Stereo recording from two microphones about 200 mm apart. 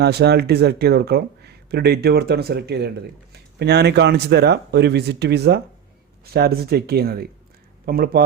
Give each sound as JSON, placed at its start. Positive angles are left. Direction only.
{"t": 0.0, "sound": "speech", "side_deg": -55}